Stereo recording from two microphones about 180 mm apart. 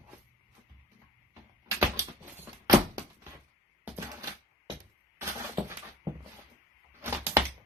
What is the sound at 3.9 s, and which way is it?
Typewriter, 15° right (ahead or behind).